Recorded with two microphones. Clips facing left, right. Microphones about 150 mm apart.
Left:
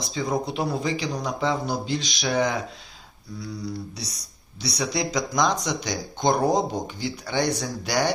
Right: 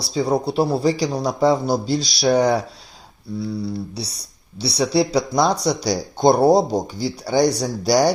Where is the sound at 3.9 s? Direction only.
30° right (ahead or behind).